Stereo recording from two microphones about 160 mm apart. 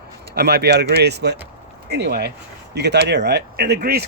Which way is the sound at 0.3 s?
85° right.